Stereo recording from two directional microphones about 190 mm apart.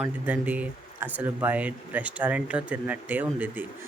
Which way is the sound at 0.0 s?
5° right (ahead or behind).